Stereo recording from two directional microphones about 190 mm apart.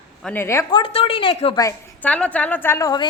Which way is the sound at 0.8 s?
30° left (ahead or behind).